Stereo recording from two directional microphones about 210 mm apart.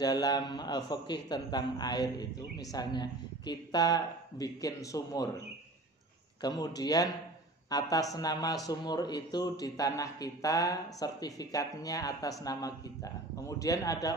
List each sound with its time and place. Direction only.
0.0 s a man's voice: 20° left (ahead or behind)
6.4 s a man's voice: 20° left (ahead or behind)